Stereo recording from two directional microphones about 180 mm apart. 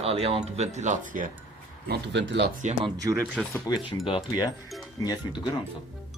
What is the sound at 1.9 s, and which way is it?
Speech, 80° right.